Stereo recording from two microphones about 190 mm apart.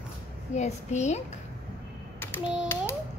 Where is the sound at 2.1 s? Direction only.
10° left (ahead or behind).